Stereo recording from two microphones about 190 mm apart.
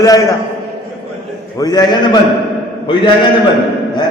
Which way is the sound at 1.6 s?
20° left (ahead or behind).